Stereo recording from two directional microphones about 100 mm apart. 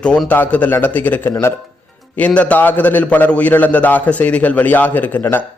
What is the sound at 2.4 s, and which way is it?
A man's voice, 15° left (ahead or behind).